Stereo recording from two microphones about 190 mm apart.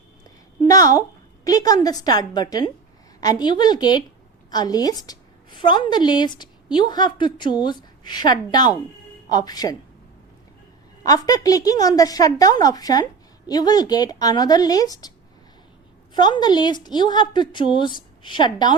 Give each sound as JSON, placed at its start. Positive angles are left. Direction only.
{"t": 0.3, "sound": "a sound", "side_deg": 20}
{"t": 1.5, "sound": "a woman's voice", "side_deg": 20}
{"t": 11.0, "sound": "a woman's voice", "side_deg": 20}
{"t": 16.1, "sound": "a woman's voice", "side_deg": 25}